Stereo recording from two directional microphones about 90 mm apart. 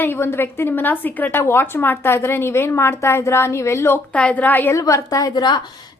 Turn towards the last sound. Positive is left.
turn(degrees=50)  # may be behind; listen again after turning